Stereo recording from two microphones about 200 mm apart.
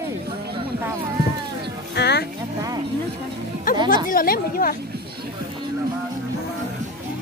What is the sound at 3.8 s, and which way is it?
Speech, 45° left (ahead or behind).